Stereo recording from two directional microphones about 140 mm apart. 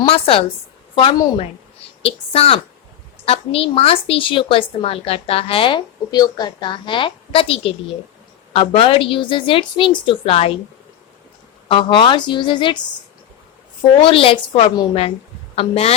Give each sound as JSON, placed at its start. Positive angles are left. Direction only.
{"t": 0.0, "sound": "a woman's voice", "side_deg": 40}
{"t": 11.7, "sound": "a woman's voice", "side_deg": 35}
{"t": 14.0, "sound": "a woman's voice", "side_deg": 40}